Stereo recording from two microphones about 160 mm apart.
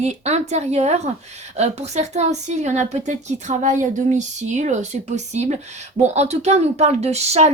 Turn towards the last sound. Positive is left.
turn(degrees=-45)  # may be behind; listen again after turning